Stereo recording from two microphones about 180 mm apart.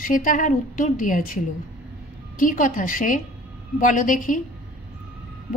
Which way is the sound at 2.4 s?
45° left (ahead or behind).